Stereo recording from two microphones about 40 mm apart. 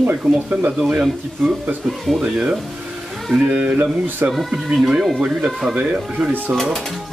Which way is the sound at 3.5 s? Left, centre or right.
Right.